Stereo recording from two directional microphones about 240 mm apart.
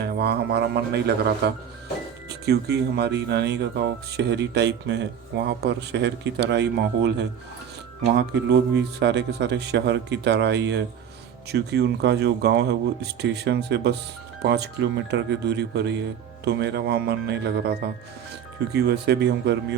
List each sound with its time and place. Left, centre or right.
0.0 s speech: right
8.4 s speech: right